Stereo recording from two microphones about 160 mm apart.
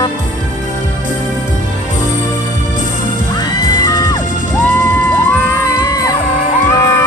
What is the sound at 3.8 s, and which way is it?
Music, 25° left (ahead or behind).